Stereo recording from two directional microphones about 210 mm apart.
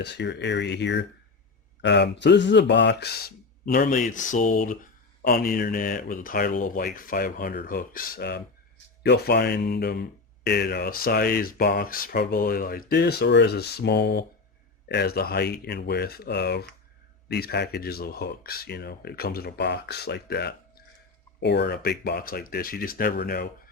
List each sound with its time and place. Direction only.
0.0 s speech: 55° left (ahead or behind)